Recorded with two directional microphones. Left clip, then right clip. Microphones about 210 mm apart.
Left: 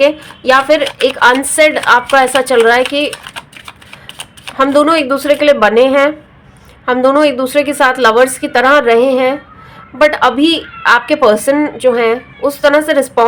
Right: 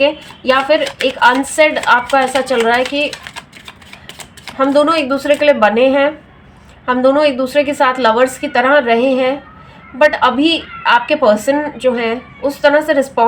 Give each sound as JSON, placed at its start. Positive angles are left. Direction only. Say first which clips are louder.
{"t": 1.2, "sound": "a woman's voice", "louder": "left 2 dB", "side_deg": 40}
{"t": 4.5, "sound": "a woman's voice", "louder": "left 2 dB", "side_deg": 40}